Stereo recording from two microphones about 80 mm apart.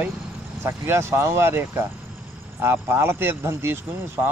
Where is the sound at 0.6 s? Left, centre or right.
Right.